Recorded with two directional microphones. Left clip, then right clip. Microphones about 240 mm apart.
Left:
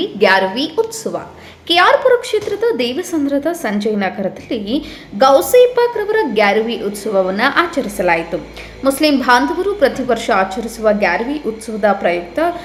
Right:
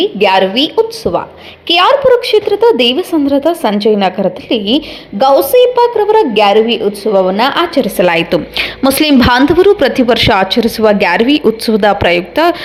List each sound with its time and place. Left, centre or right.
0.0 s a woman's voice: centre; by 12.5 s right